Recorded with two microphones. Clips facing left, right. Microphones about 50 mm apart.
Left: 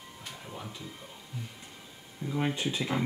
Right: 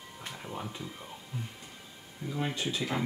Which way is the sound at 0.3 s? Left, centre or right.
Centre.